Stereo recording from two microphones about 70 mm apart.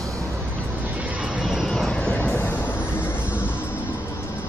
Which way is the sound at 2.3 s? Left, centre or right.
Left.